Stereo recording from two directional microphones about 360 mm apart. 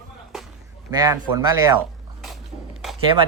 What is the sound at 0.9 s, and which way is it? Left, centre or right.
Speech, centre.